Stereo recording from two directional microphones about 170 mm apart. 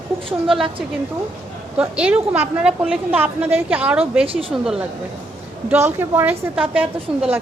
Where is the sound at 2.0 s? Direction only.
10° right (ahead or behind).